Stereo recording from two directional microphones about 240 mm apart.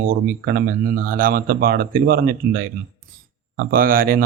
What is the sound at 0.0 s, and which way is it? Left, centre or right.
A man's voice, right.